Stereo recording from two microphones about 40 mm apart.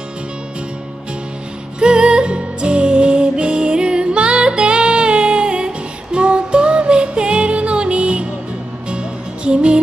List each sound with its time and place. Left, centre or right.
1.8 s music: right